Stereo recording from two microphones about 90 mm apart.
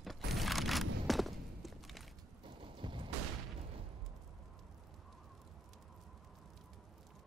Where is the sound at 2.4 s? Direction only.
65° right (ahead or behind).